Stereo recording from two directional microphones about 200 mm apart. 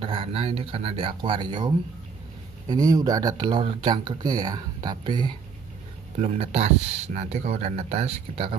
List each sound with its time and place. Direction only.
0.0 s speech: 25° right (ahead or behind)
2.7 s speech: 20° right (ahead or behind)